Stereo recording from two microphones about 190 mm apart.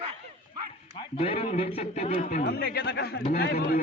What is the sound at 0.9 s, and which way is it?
A man's voice, 30° left (ahead or behind).